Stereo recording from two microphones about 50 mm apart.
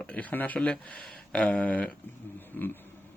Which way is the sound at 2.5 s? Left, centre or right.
Left.